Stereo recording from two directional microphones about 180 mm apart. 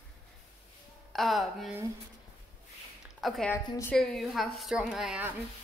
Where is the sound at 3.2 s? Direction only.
Centre (ahead or behind).